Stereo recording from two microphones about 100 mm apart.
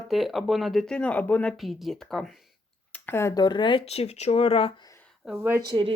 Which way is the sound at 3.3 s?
50° left (ahead or behind).